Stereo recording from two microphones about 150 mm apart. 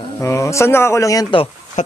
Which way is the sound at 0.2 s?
20° left (ahead or behind).